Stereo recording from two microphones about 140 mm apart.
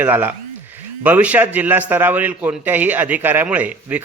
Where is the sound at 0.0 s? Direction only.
15° right (ahead or behind).